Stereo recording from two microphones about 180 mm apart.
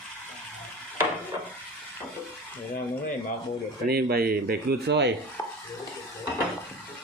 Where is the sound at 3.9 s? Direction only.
60° right (ahead or behind).